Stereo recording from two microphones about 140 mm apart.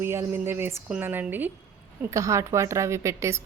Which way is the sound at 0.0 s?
20° right (ahead or behind).